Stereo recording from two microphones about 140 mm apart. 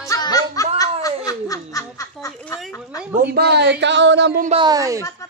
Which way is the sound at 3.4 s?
90° right.